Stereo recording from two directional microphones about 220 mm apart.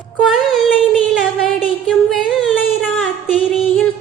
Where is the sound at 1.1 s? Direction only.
Centre (ahead or behind).